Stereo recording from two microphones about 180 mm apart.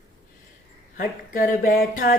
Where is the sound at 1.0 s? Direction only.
50° left (ahead or behind).